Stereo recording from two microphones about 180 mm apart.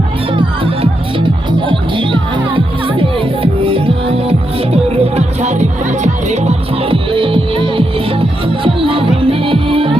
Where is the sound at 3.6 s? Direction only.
30° right (ahead or behind).